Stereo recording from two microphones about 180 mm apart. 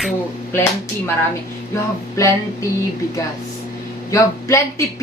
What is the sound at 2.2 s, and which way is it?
Speech, 15° left (ahead or behind).